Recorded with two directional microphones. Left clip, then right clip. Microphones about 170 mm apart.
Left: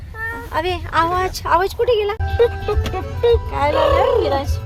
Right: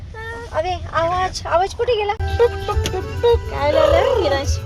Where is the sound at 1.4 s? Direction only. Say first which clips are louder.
Left 2 dB; 10° left (ahead or behind).